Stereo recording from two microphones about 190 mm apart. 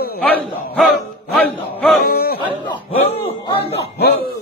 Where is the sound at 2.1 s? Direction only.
50° left (ahead or behind).